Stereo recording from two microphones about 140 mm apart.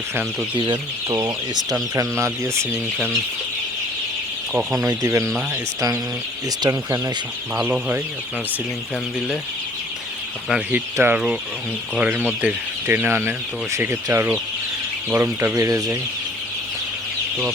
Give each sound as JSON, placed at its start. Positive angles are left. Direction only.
{"t": 0.5, "sound": "speech", "side_deg": -35}
{"t": 2.0, "sound": "speech", "side_deg": -20}
{"t": 4.8, "sound": "speech", "side_deg": -20}
{"t": 7.6, "sound": "speech", "side_deg": -15}
{"t": 10.5, "sound": "speech", "side_deg": -10}